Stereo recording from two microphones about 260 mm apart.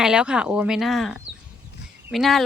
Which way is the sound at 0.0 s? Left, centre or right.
Centre.